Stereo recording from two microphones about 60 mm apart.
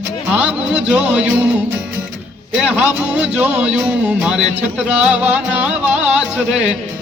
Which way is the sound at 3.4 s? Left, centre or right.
Right.